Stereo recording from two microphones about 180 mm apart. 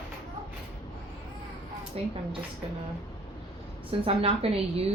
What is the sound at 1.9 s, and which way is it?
Speech, 35° right (ahead or behind).